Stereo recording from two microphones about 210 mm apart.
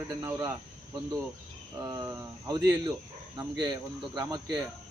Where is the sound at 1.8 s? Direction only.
15° right (ahead or behind).